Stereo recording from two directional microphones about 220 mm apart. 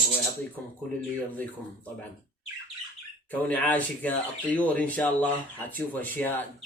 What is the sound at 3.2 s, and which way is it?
Speech, 5° left (ahead or behind).